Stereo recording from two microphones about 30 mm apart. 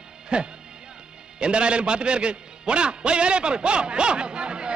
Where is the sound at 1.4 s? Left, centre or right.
Right.